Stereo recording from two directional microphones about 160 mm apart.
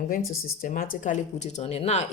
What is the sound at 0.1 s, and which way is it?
Speech, 60° left (ahead or behind).